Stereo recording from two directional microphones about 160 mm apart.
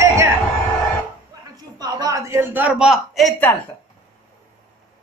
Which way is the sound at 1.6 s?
25° right (ahead or behind).